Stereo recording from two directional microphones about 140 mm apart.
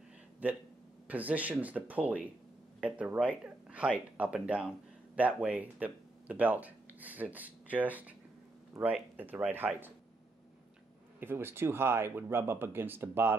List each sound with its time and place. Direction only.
0.4 s speech: 10° right (ahead or behind)
8.8 s speech: 25° right (ahead or behind)
9.1 s speech: 10° right (ahead or behind)
11.1 s speech: 15° right (ahead or behind)